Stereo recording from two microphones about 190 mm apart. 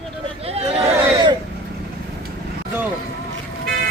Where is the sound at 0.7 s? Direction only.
15° right (ahead or behind).